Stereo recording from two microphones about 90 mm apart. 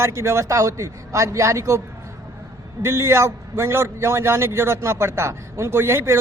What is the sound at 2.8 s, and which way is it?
A man's voice, 30° right (ahead or behind).